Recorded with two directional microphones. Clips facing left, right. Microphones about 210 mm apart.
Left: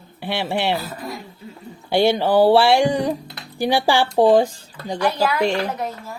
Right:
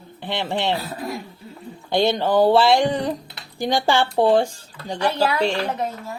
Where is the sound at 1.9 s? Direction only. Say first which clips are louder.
Left 2 dB; 10° left (ahead or behind).